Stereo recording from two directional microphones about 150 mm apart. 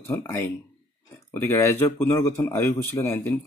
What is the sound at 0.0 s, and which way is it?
Speech, 15° left (ahead or behind).